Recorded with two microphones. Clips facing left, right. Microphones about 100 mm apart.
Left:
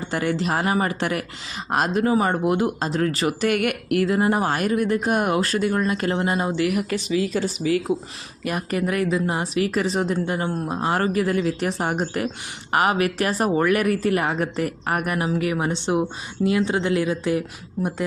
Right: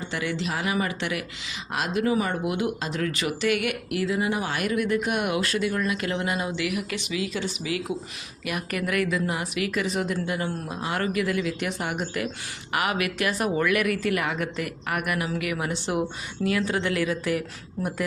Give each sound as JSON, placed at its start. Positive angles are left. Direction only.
{"t": 0.1, "sound": "a woman's voice", "side_deg": 45}